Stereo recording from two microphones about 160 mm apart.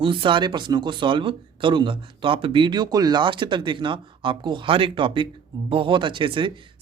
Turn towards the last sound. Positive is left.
turn(degrees=-30)  # may be behind; listen again after turning